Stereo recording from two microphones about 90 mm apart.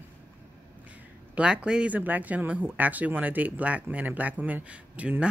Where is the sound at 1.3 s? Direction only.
10° right (ahead or behind).